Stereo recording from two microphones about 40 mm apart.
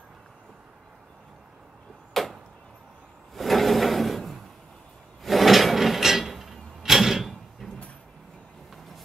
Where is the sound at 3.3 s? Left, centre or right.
Centre.